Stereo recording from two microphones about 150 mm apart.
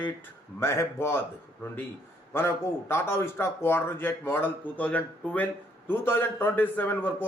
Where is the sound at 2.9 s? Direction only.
15° left (ahead or behind).